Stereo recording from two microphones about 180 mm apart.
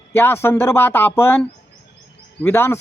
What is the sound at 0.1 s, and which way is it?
A man's voice, 10° left (ahead or behind).